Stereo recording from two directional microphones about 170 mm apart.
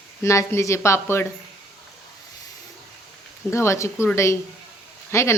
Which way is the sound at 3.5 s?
15° left (ahead or behind).